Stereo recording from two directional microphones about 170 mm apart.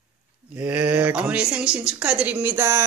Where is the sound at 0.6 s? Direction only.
10° right (ahead or behind).